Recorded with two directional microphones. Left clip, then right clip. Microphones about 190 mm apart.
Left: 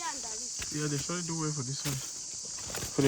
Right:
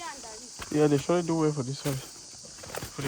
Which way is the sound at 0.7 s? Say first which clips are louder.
Right 13 dB; 25° right (ahead or behind).